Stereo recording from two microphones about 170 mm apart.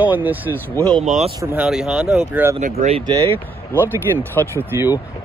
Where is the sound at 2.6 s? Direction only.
40° right (ahead or behind).